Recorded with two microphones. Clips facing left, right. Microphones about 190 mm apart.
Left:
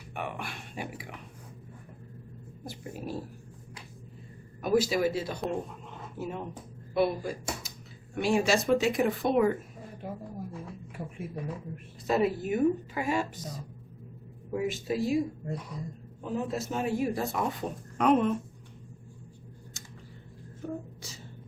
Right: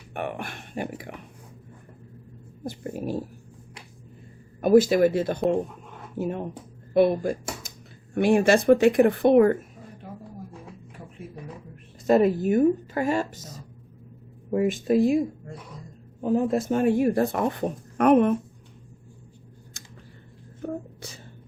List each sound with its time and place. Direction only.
0.1 s a woman's voice: 55° right (ahead or behind)
2.6 s a woman's voice: 50° right (ahead or behind)
4.6 s a woman's voice: 50° right (ahead or behind)
12.0 s a woman's voice: 50° right (ahead or behind)
14.5 s speech: 55° right (ahead or behind)
16.2 s speech: 50° right (ahead or behind)
20.6 s a sound: 55° right (ahead or behind)